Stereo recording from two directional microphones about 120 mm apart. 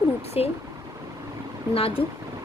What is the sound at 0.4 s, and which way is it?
Speech, 55° left (ahead or behind).